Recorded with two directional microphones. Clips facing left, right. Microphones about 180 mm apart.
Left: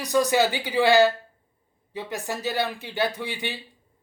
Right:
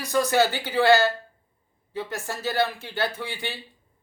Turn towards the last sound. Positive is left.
turn(degrees=15)  # may be behind; listen again after turning